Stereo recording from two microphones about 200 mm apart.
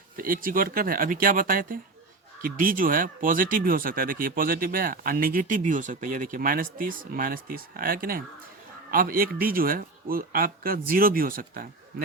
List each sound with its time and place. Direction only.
0.2 s speech: 45° right (ahead or behind)